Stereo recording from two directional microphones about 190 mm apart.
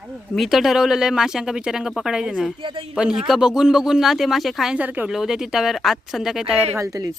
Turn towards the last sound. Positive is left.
turn(degrees=-15)  # may be behind; listen again after turning